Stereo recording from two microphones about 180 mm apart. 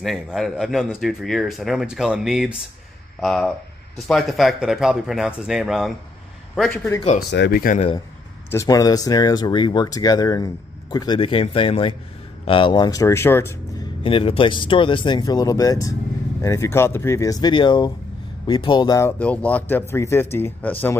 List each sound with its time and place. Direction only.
0.0 s speech: centre (ahead or behind)
7.2 s speech: 70° left (ahead or behind)
7.6 s a man's voice: 45° left (ahead or behind)
8.5 s speech: 20° left (ahead or behind)
14.0 s speech: 30° left (ahead or behind); by 20.7 s 10° left (ahead or behind)